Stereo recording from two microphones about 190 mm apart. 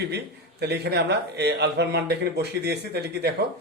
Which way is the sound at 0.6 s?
60° right (ahead or behind).